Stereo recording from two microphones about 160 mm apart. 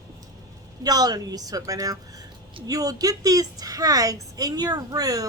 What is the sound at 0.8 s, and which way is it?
A woman's voice, 25° right (ahead or behind).